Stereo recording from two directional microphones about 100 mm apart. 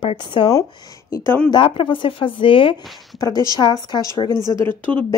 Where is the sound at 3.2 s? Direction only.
40° left (ahead or behind).